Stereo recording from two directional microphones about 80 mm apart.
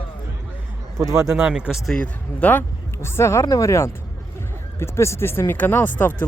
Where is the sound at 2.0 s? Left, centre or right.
Left.